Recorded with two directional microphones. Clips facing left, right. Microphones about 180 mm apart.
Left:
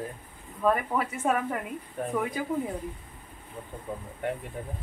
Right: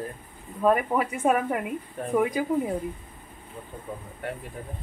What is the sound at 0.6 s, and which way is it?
Speech, 15° right (ahead or behind).